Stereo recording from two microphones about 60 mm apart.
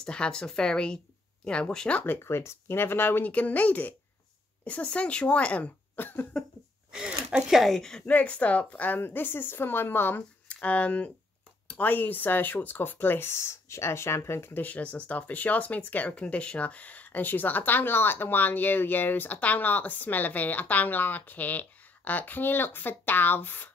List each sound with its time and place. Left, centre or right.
0.0 s speech: centre
2.2 s speech: left
5.9 s cough: left
6.9 s speech: centre
8.1 s speech: left
10.5 s speech: left
14.5 s speech: left